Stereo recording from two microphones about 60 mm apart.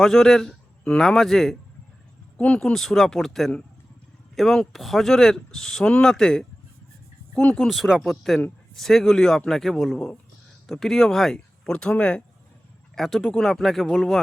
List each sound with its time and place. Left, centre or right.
0.0 s a man's voice: centre
2.4 s speech: centre
2.7 s a man's voice: centre
8.1 s a man's voice: centre
13.0 s a man's voice: centre